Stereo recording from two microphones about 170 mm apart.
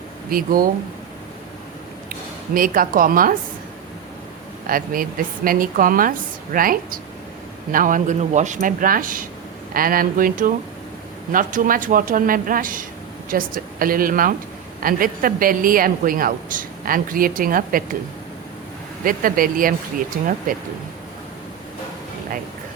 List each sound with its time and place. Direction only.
0.3 s a woman's voice: 55° right (ahead or behind)
2.6 s a woman's voice: 55° right (ahead or behind)
4.6 s a woman's voice: 55° right (ahead or behind)
19.0 s a woman's voice: 55° right (ahead or behind)